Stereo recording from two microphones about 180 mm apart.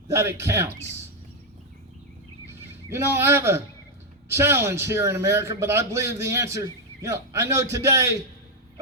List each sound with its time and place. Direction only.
0.1 s a man's voice: 15° right (ahead or behind)
2.9 s a man's voice: 15° right (ahead or behind)